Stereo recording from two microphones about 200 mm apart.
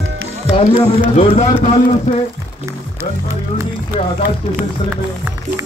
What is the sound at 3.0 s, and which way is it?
Speech, 15° right (ahead or behind).